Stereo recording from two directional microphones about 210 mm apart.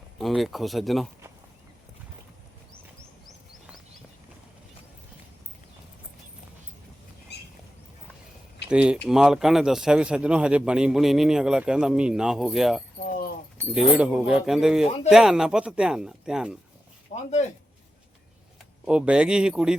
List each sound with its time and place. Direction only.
0.2 s a man's voice: centre (ahead or behind)
7.3 s duck: 50° left (ahead or behind)
8.7 s a man's voice: 5° right (ahead or behind)
17.1 s speech: 40° left (ahead or behind)
18.9 s a man's voice: 5° right (ahead or behind)